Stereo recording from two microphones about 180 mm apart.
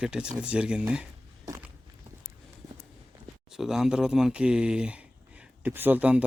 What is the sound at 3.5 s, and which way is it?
Speech, centre (ahead or behind).